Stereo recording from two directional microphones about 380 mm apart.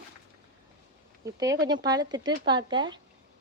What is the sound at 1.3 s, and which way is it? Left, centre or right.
Speech, centre.